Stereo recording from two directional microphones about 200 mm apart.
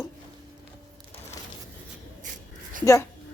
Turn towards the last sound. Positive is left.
turn(degrees=15)  # may be behind; listen again after turning